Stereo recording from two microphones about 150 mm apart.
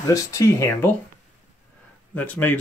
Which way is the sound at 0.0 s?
20° left (ahead or behind).